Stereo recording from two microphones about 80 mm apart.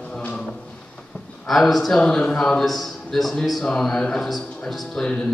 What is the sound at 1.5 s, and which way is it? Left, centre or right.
A man's voice, centre.